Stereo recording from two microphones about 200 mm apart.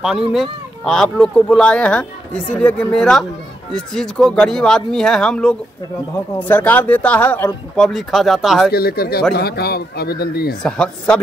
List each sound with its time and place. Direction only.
0.0 s speech: 5° right (ahead or behind)
8.7 s speech: 50° left (ahead or behind)
10.6 s speech: 5° left (ahead or behind)